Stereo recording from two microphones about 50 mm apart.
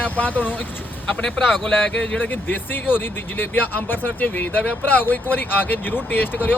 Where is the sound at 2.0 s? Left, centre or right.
Left.